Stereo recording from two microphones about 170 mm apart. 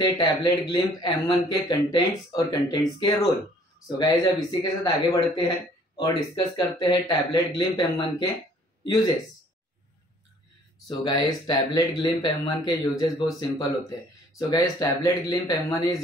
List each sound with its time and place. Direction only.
0.0 s speech: 25° left (ahead or behind)
10.9 s speech: 25° left (ahead or behind)